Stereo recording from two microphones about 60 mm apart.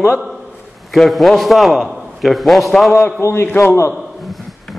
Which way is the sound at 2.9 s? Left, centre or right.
Left.